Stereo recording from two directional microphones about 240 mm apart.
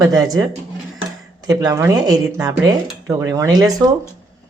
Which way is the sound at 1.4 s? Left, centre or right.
Centre.